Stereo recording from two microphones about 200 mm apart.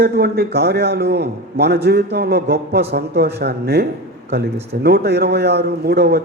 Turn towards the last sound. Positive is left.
turn(degrees=-55)  # may be behind; listen again after turning